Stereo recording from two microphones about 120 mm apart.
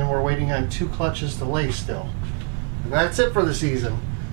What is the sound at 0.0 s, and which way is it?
A man's voice, 15° right (ahead or behind).